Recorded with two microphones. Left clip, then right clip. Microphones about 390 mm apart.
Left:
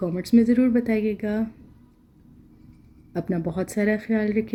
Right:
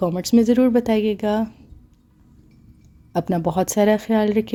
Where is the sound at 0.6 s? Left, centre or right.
Right.